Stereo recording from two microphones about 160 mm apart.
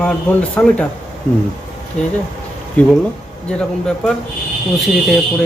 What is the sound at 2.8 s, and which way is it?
Speech, 5° left (ahead or behind).